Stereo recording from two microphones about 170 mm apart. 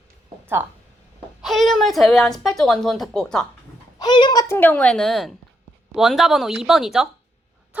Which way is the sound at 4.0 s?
25° left (ahead or behind).